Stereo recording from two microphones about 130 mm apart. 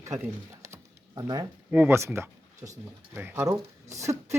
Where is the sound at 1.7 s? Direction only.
15° right (ahead or behind).